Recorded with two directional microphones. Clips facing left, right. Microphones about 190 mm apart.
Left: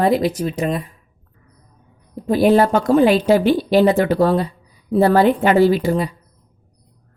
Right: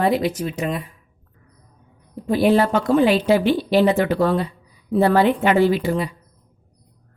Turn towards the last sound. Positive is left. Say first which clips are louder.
# left 3 dB
turn(degrees=40)  # may be behind; listen again after turning